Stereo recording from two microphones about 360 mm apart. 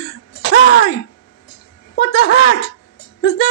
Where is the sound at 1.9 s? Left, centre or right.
Left.